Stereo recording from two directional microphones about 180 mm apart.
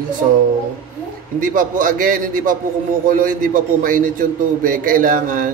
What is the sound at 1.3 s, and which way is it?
Speech, 50° right (ahead or behind).